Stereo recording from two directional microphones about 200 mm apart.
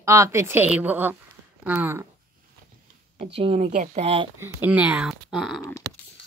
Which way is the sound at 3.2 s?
30° right (ahead or behind).